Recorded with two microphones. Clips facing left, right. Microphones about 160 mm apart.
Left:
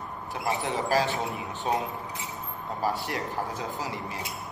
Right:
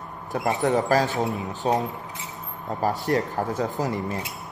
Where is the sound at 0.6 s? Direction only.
45° right (ahead or behind).